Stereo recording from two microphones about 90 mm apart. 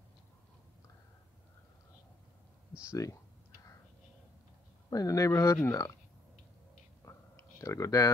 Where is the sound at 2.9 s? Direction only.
35° left (ahead or behind).